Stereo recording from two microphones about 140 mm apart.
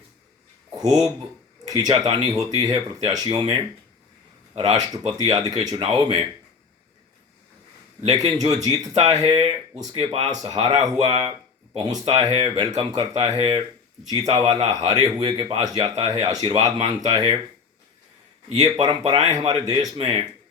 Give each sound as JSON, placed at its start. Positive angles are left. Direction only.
{"t": 0.8, "sound": "a man's voice", "side_deg": -25}
{"t": 8.6, "sound": "a man's voice", "side_deg": -25}
{"t": 9.3, "sound": "speech", "side_deg": -40}
{"t": 10.2, "sound": "a man's voice", "side_deg": -30}
{"t": 18.8, "sound": "a man's voice", "side_deg": -35}